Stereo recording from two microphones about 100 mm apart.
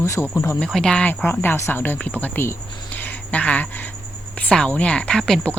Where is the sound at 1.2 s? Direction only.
20° left (ahead or behind).